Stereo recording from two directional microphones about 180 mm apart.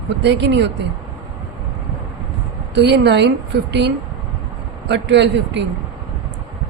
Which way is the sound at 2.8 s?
75° right (ahead or behind).